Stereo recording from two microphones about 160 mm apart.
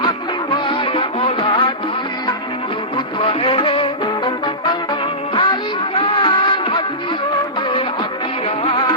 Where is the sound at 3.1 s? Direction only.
35° left (ahead or behind).